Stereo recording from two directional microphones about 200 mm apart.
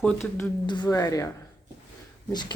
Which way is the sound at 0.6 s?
20° left (ahead or behind).